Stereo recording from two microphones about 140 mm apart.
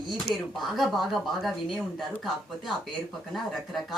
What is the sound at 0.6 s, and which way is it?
Speech, centre (ahead or behind).